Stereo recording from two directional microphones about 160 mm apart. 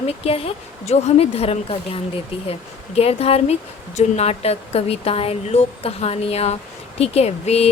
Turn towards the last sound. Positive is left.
turn(degrees=40)  # may be behind; listen again after turning